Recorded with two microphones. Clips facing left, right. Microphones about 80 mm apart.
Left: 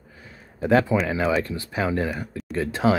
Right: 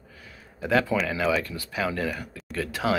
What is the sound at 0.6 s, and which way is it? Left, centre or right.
Speech, left.